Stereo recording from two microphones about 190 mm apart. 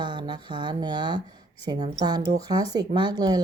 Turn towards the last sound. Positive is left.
turn(degrees=-20)  # may be behind; listen again after turning